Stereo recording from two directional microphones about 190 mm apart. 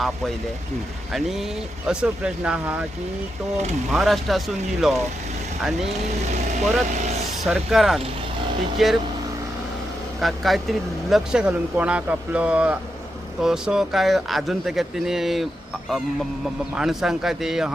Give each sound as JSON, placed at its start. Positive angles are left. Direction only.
{"t": 1.1, "sound": "speech", "side_deg": 0}
{"t": 3.9, "sound": "speech", "side_deg": 0}
{"t": 6.9, "sound": "speech", "side_deg": -40}
{"t": 7.4, "sound": "speech", "side_deg": 0}
{"t": 10.2, "sound": "speech", "side_deg": 0}
{"t": 16.7, "sound": "speech", "side_deg": 0}